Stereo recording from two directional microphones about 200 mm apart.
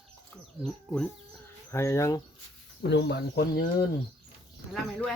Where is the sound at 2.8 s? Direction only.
60° left (ahead or behind).